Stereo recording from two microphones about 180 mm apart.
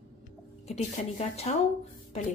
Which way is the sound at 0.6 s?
35° left (ahead or behind).